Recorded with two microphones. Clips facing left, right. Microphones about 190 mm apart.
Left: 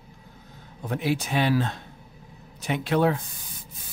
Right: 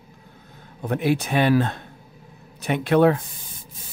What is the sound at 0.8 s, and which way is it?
Speech, 55° right (ahead or behind).